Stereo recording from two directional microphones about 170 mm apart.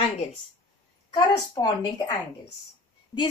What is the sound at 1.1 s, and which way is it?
A woman's voice, 30° left (ahead or behind).